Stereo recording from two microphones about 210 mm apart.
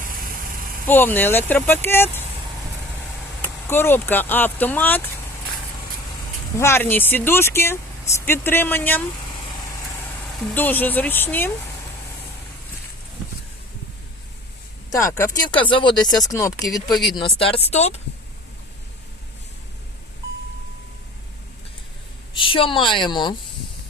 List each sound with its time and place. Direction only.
0.9 s speech: 10° left (ahead or behind)
3.4 s speech: 10° left (ahead or behind)
6.6 s speech: 10° left (ahead or behind)
10.5 s speech: 10° left (ahead or behind)
14.9 s speech: 15° left (ahead or behind); by 18.0 s 30° left (ahead or behind)
22.4 s speech: 25° left (ahead or behind)